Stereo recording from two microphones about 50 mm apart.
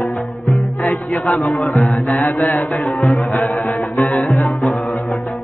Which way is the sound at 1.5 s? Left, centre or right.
Left.